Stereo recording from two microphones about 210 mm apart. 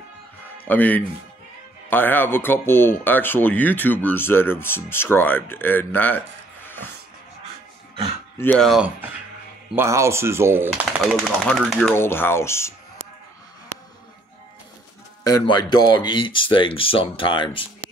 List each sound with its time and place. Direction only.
0.7 s speech: 10° left (ahead or behind)
8.4 s speech: 5° left (ahead or behind)
9.8 s speech: 15° right (ahead or behind)
11.4 s speech: centre (ahead or behind)
15.2 s speech: 20° left (ahead or behind)